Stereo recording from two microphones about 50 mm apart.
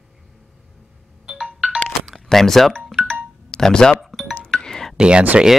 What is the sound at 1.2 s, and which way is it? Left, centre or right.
Ringtone, centre.